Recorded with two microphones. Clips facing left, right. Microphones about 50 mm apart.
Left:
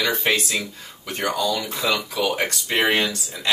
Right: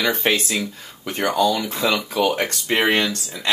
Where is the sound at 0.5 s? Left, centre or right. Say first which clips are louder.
Right 2 dB; centre.